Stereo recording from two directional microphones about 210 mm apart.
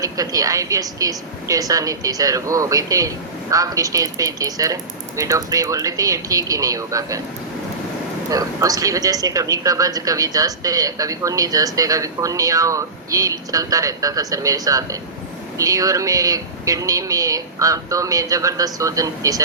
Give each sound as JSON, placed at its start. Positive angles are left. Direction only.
{"t": 0.0, "sound": "a man's voice", "side_deg": -15}
{"t": 8.3, "sound": "a man's voice", "side_deg": -15}